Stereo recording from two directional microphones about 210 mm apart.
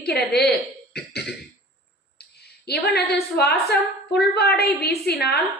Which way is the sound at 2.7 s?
50° left (ahead or behind).